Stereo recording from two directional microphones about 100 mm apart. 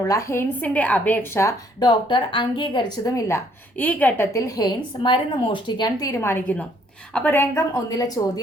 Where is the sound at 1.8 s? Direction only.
50° left (ahead or behind); by 3.4 s 30° left (ahead or behind).